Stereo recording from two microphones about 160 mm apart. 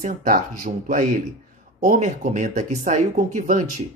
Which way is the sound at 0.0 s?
55° right (ahead or behind).